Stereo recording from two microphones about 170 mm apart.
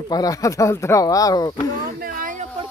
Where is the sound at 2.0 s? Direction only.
55° right (ahead or behind).